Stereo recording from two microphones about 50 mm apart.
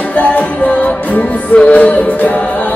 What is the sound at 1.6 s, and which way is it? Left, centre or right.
A capella, left.